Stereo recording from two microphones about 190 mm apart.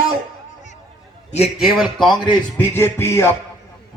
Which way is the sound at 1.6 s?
Centre (ahead or behind).